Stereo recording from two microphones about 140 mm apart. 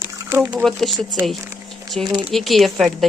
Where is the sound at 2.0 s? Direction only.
30° right (ahead or behind).